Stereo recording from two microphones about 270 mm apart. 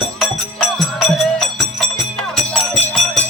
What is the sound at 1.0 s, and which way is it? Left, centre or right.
Music, centre.